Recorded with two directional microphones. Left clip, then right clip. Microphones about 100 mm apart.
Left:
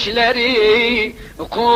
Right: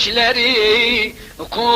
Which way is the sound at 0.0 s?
25° left (ahead or behind).